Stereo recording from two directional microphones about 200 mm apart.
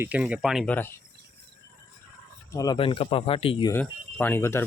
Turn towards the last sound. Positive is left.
turn(degrees=10)  # may be behind; listen again after turning